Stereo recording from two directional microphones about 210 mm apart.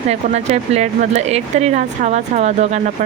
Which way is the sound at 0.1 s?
30° right (ahead or behind).